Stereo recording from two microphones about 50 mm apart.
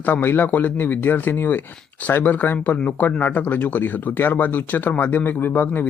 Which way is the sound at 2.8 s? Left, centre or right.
Left.